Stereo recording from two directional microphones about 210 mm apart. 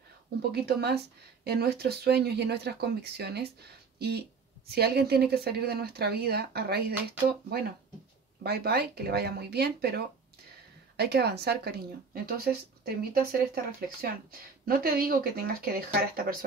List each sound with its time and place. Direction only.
0.4 s speech: 50° right (ahead or behind)
4.6 s speech: 50° right (ahead or behind)
8.5 s speech: 50° right (ahead or behind)